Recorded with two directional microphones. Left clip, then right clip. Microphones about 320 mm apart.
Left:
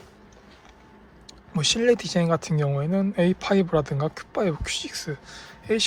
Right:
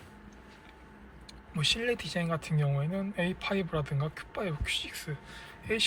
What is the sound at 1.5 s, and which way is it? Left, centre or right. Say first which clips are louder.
Speech: left 9 dB; centre.